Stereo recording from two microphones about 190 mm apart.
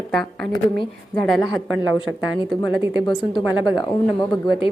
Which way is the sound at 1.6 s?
90° right.